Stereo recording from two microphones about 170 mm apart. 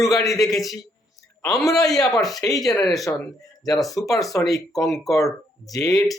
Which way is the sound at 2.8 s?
Centre (ahead or behind).